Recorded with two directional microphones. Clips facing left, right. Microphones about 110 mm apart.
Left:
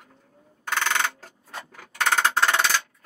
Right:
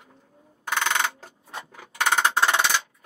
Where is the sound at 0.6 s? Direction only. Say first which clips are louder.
Even; 15° right (ahead or behind).